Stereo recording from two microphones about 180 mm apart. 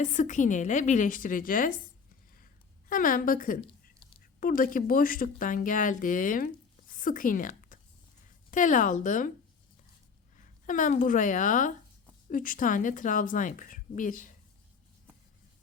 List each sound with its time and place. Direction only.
0.0 s speech: 45° left (ahead or behind)
2.9 s a woman's voice: 50° left (ahead or behind)
10.3 s speech: 45° left (ahead or behind)